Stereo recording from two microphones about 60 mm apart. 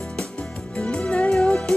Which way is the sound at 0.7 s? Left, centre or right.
Centre.